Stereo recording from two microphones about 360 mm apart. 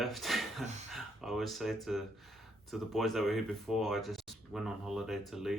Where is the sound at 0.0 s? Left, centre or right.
Centre.